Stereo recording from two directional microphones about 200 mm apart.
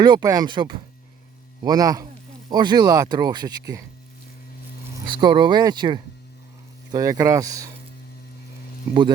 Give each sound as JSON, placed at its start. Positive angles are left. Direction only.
{"t": 0.0, "sound": "speech", "side_deg": -20}
{"t": 5.1, "sound": "speech", "side_deg": -20}